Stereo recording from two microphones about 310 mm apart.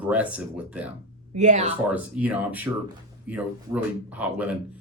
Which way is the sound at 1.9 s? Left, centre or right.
Centre.